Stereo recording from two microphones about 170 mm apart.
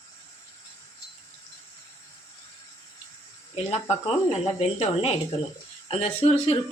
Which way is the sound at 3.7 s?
35° left (ahead or behind).